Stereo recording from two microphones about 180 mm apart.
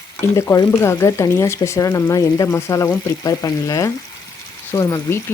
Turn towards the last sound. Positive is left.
turn(degrees=15)  # may be behind; listen again after turning